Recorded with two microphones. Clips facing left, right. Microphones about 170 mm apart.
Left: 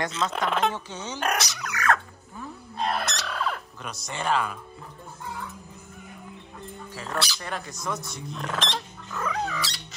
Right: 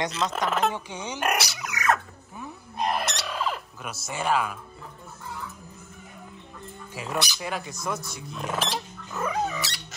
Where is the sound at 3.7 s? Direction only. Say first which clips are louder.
Right 1 dB; 5° right (ahead or behind).